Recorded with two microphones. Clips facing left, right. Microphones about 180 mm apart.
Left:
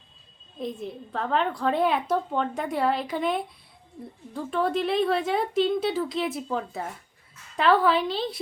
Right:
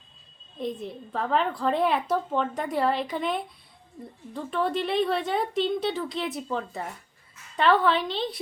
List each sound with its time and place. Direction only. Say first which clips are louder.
0.6 s a woman's voice: right 1 dB; centre (ahead or behind)